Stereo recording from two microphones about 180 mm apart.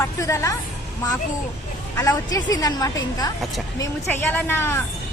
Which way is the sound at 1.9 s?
20° left (ahead or behind).